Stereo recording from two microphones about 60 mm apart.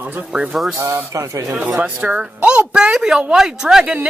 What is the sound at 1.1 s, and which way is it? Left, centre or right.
Speech, right.